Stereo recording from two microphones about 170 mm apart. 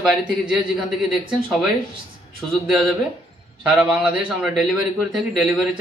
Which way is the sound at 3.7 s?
5° right (ahead or behind).